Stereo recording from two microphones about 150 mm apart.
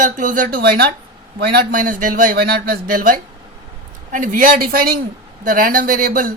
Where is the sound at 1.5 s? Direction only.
70° right (ahead or behind); by 4.9 s 85° right.